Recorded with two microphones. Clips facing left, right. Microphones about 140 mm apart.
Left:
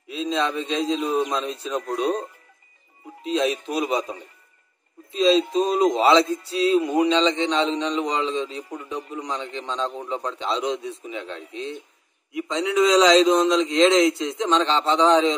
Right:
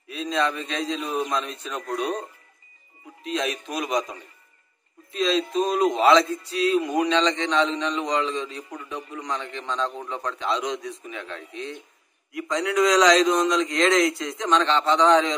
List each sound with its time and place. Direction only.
0.1 s a man's voice: 25° left (ahead or behind)
3.3 s a man's voice: 30° left (ahead or behind)